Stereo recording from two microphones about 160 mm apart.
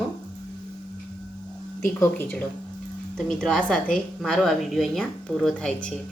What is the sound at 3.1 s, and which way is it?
A woman's voice, 5° left (ahead or behind).